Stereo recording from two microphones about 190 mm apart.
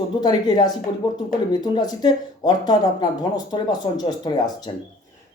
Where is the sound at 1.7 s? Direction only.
20° left (ahead or behind).